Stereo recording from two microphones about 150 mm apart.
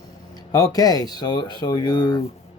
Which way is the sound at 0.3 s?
25° left (ahead or behind).